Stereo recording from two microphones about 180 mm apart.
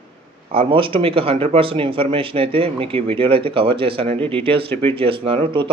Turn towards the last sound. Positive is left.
turn(degrees=-30)  # may be behind; listen again after turning